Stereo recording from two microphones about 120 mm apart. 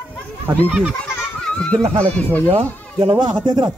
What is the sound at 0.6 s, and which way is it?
Speech, 10° right (ahead or behind).